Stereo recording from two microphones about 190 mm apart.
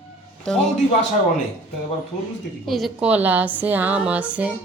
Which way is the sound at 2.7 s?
Centre (ahead or behind).